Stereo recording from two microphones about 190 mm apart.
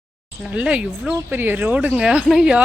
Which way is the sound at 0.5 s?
5° right (ahead or behind).